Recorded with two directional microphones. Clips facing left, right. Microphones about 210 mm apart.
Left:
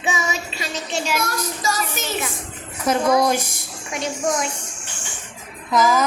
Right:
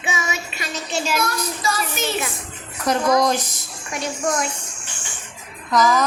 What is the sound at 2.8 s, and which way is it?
Speech, 5° left (ahead or behind).